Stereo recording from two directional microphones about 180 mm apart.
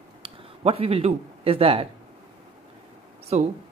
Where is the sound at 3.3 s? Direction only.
40° right (ahead or behind).